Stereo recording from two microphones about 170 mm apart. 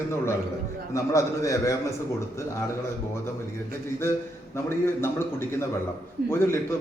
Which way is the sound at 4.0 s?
15° left (ahead or behind).